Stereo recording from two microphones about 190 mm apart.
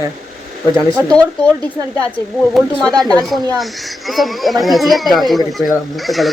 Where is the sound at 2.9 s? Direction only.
20° right (ahead or behind).